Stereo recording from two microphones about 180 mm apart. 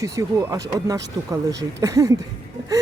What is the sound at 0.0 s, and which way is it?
Speech, 20° right (ahead or behind).